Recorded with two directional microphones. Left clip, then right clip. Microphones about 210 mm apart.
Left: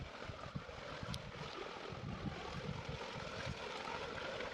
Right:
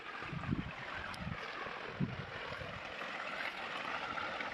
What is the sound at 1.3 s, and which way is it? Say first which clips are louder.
Vehicle: right 5 dB; 60° left (ahead or behind).